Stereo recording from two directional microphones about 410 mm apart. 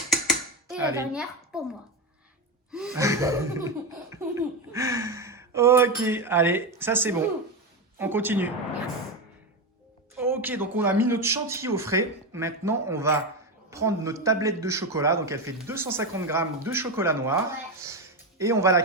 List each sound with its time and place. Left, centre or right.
0.1 s dishes: centre
2.7 s a man's voice: centre
10.2 s a man's voice: centre